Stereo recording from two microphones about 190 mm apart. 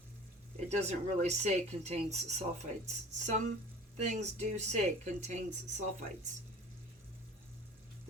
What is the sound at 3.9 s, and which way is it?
Speech, 35° right (ahead or behind).